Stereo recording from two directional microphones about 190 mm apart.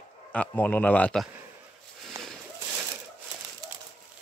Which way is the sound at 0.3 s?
10° left (ahead or behind).